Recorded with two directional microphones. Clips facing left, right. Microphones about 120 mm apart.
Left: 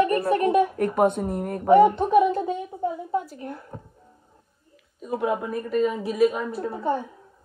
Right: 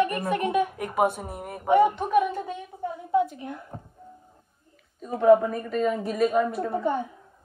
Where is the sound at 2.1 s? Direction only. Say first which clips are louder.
Left 4 dB; 20° left (ahead or behind).